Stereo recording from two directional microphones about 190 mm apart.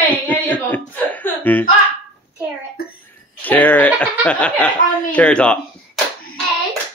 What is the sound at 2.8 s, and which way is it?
Speech, 55° left (ahead or behind).